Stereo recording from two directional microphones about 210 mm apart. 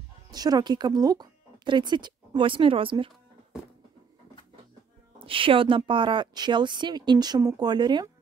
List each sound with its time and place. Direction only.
0.3 s speech: 20° right (ahead or behind)
5.2 s speech: 25° right (ahead or behind)